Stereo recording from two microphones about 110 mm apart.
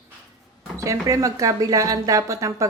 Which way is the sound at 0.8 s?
30° right (ahead or behind).